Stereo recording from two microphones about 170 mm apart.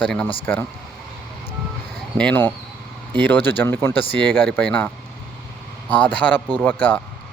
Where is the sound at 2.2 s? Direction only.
10° left (ahead or behind).